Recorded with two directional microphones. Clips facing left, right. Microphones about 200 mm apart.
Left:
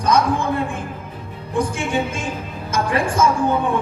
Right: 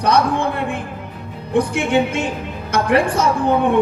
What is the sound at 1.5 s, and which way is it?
A woman's voice, 65° right (ahead or behind).